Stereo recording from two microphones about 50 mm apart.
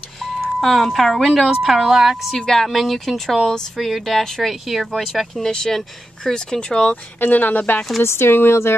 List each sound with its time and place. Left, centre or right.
0.2 s speech: centre
1.4 s speech: centre
2.3 s speech: centre
5.4 s speech: centre
7.2 s speech: left
8.0 s speech: left